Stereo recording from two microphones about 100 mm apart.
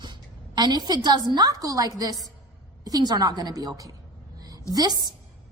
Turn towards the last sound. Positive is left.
turn(degrees=-40)  # may be behind; listen again after turning